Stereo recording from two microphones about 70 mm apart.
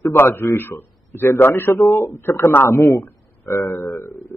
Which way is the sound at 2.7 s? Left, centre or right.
Left.